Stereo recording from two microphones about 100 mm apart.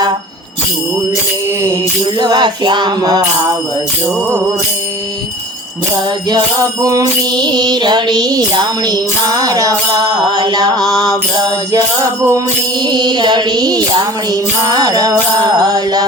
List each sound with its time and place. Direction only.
2.1 s music: 45° right (ahead or behind)
6.2 s music: 40° right (ahead or behind)